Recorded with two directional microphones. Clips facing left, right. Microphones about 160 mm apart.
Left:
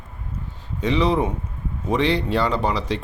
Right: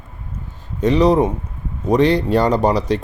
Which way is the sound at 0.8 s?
45° right (ahead or behind).